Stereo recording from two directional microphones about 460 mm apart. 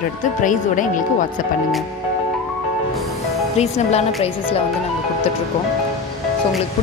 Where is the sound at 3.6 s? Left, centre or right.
Centre.